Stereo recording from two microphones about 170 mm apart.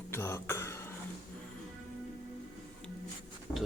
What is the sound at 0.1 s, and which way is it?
Throat clearing, 15° left (ahead or behind).